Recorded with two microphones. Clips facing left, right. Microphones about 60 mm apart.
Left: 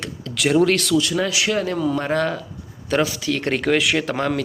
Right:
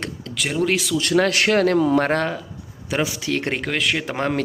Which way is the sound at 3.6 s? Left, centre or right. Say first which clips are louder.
Left 4 dB; centre.